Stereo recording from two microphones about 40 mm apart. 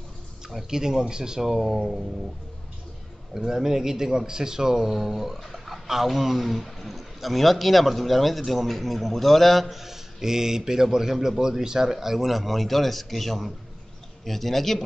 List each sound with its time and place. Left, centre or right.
0.7 s speech: centre
1.5 s speech: centre
3.3 s speech: centre